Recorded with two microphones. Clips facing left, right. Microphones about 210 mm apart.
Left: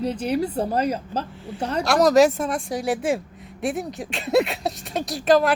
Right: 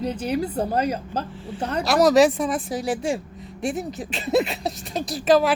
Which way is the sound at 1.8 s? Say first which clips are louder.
Even; centre (ahead or behind).